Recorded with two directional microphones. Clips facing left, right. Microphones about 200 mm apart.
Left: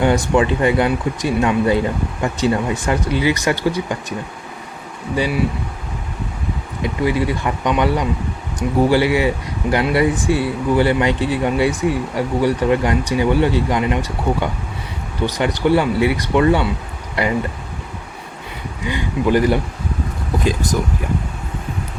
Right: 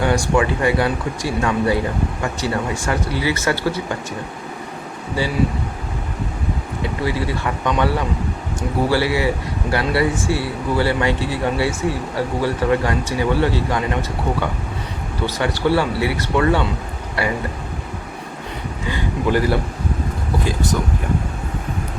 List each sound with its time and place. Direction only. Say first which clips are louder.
0.0 s speech: left 2 dB; 20° left (ahead or behind)
6.8 s speech: left 4 dB; 15° left (ahead or behind)
15.3 s speech: left 2 dB; 20° left (ahead or behind)
18.9 s speech: left 3 dB; 20° left (ahead or behind)